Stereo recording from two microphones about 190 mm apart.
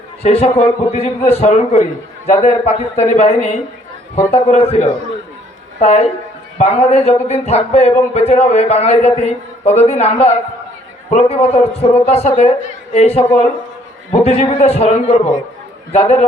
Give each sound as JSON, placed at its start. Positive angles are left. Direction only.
{"t": 0.2, "sound": "a man's voice", "side_deg": 30}